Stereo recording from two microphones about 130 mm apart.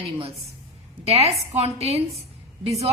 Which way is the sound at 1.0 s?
50° right (ahead or behind).